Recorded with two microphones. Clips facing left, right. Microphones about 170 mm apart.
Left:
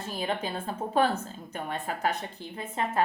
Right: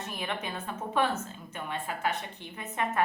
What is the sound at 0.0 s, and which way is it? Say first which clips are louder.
A woman's voice: left 4 dB; 30° left (ahead or behind).